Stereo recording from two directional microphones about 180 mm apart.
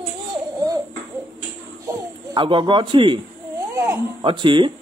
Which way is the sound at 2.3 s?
25° right (ahead or behind).